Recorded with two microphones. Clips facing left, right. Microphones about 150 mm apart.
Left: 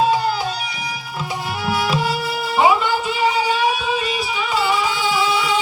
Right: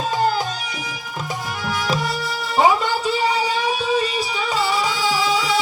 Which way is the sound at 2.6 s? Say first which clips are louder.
Left 1 dB; 40° right (ahead or behind).